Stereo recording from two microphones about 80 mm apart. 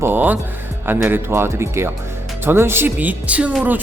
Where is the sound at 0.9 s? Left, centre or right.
Right.